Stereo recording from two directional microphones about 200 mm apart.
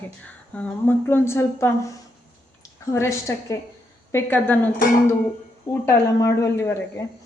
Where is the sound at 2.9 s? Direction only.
15° left (ahead or behind).